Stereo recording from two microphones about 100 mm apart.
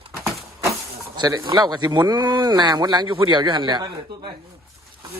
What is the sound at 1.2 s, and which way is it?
Speech, 45° right (ahead or behind).